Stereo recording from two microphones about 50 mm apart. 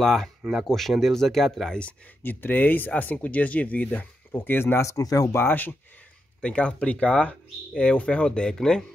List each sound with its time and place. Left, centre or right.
0.0 s speech: centre
2.2 s speech: left
4.4 s speech: left
4.7 s speech: left
5.5 s speech: left
6.4 s speech: left